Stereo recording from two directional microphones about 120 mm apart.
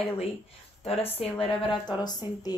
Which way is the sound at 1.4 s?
40° left (ahead or behind).